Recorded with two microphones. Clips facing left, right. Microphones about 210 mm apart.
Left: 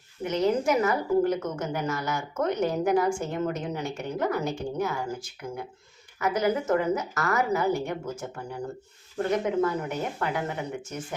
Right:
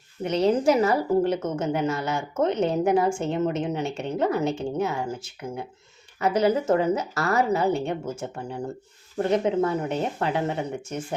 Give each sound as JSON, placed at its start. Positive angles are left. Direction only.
{"t": 0.3, "sound": "a woman's voice", "side_deg": -30}